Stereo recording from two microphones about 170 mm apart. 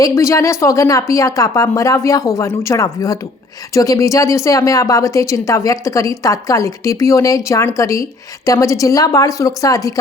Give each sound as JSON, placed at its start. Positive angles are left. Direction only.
{"t": 0.0, "sound": "speech", "side_deg": 15}